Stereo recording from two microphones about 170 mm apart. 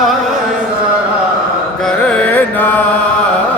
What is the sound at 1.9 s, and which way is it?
Music, 5° left (ahead or behind).